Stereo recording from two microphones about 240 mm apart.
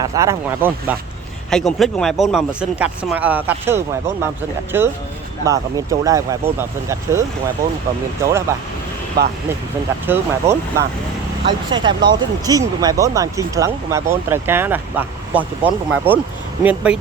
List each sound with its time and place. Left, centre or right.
0.0 s speech: centre
9.2 s speech: right
10.1 s speech: centre